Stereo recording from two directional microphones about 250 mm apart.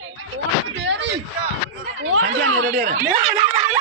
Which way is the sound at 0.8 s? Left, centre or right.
Right.